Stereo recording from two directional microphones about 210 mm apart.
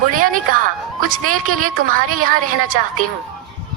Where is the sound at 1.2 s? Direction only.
90° right.